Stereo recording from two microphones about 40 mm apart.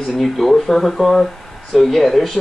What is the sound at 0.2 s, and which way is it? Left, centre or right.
Speech, centre.